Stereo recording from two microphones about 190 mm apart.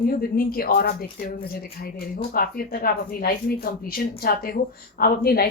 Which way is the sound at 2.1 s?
50° left (ahead or behind).